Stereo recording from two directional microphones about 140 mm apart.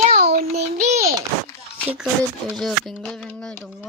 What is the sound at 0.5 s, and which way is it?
Speech, 50° right (ahead or behind).